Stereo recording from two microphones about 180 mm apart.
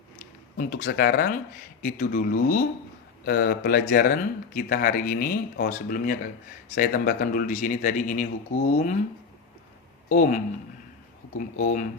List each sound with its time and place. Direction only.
0.5 s speech: 55° left (ahead or behind)
1.8 s speech: 50° left (ahead or behind)
3.2 s speech: 60° left (ahead or behind)
10.1 s speech: 45° left (ahead or behind)